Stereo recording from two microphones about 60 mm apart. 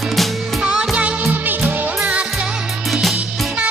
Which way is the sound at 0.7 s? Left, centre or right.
Centre.